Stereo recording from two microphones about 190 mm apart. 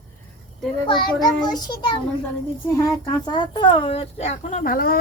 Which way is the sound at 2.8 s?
20° left (ahead or behind).